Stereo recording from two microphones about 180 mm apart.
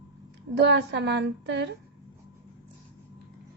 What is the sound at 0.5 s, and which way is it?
A woman's voice, 75° right (ahead or behind).